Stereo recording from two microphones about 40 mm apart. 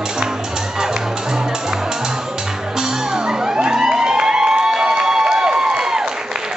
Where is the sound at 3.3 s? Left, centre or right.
Centre.